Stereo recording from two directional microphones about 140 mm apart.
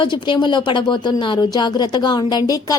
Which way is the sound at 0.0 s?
35° left (ahead or behind).